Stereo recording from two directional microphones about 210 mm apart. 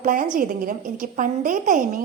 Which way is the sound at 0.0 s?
40° right (ahead or behind).